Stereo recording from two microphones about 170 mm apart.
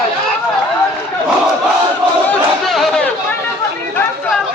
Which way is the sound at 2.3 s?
Centre (ahead or behind).